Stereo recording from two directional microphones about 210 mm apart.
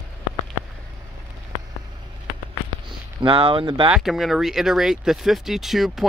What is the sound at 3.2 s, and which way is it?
Speech, 25° right (ahead or behind).